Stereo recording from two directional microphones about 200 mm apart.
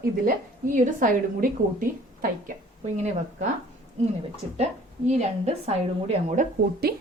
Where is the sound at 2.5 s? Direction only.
35° right (ahead or behind).